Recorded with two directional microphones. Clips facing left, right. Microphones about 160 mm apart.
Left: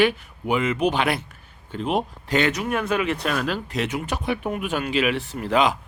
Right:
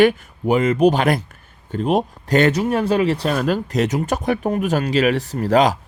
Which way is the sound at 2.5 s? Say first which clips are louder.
Right 6 dB; 30° right (ahead or behind).